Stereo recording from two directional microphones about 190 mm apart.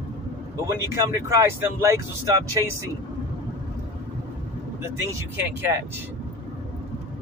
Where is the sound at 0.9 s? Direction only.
15° right (ahead or behind).